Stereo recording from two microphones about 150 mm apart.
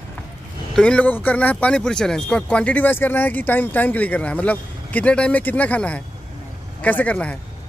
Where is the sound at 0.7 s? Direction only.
5° left (ahead or behind).